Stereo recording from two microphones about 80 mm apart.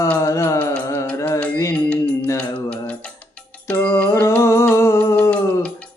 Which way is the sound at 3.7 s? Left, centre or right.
Left.